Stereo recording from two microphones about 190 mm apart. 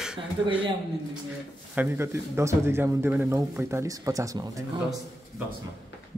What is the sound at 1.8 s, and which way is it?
Speech, 10° right (ahead or behind).